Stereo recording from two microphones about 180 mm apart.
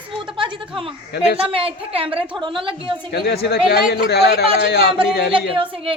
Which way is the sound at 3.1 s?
65° left (ahead or behind).